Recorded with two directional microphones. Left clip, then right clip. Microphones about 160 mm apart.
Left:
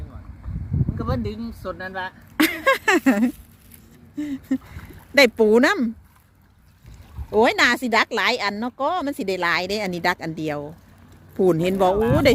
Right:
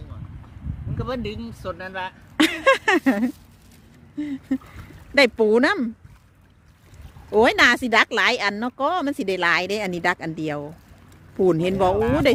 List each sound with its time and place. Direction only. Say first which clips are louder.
0.9 s speech: right 1 dB; 20° right (ahead or behind)
2.8 s speech: left 1 dB; centre (ahead or behind)
7.3 s speech: right 1 dB; 20° right (ahead or behind); by 12.0 s 5° right (ahead or behind)